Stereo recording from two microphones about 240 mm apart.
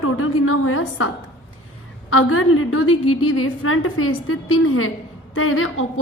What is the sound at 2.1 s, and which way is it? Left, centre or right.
A woman's voice, left.